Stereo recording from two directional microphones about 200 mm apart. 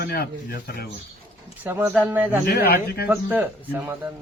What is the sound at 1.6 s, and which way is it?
Speech, 10° right (ahead or behind).